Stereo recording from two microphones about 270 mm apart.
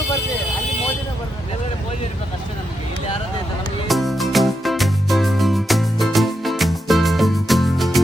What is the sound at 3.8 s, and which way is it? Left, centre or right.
Music, centre.